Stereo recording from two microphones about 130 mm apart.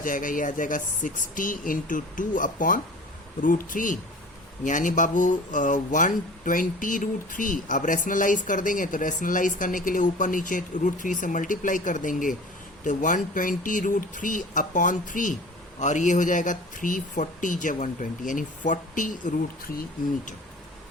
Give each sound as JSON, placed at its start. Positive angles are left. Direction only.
{"t": 0.0, "sound": "speech", "side_deg": 90}
{"t": 12.8, "sound": "speech", "side_deg": 80}
{"t": 15.8, "sound": "speech", "side_deg": 70}